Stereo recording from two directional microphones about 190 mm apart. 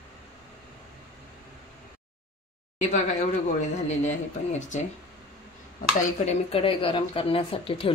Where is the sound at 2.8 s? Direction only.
40° left (ahead or behind).